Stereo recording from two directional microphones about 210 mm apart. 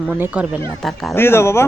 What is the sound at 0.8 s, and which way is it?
Speech, centre (ahead or behind).